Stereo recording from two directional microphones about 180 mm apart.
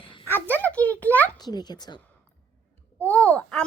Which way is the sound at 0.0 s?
30° left (ahead or behind).